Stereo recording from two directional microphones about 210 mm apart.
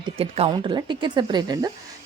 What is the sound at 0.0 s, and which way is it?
Speech, 25° right (ahead or behind).